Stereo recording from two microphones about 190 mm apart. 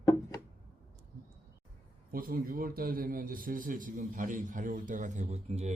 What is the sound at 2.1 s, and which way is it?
A man's voice, 50° right (ahead or behind).